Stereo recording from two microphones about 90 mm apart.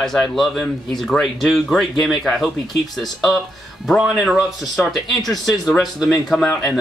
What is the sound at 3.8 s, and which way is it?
Speech, centre (ahead or behind).